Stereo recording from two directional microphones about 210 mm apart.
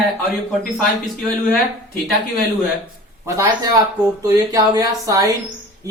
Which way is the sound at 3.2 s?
15° right (ahead or behind).